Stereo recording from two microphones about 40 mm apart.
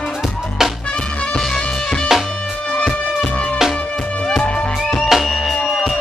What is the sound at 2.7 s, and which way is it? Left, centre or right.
Music, left.